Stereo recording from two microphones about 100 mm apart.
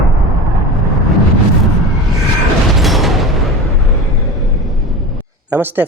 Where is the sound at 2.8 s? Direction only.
Centre (ahead or behind).